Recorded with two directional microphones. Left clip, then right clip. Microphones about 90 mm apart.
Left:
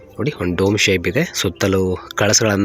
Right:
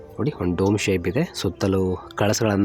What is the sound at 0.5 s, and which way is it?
Speech, 20° left (ahead or behind).